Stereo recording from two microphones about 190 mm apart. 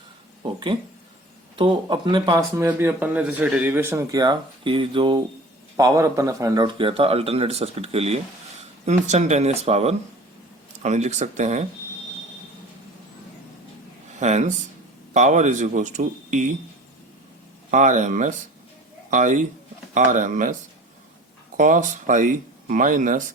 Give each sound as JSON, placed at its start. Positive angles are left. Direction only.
{"t": 1.5, "sound": "a man's voice", "side_deg": -25}
{"t": 2.6, "sound": "a man's voice", "side_deg": -10}
{"t": 14.2, "sound": "speech", "side_deg": -40}
{"t": 17.7, "sound": "speech", "side_deg": -40}